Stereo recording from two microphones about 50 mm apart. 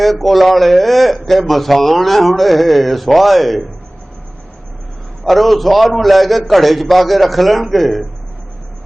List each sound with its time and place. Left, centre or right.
0.0 s a man's voice: centre
5.2 s a man's voice: centre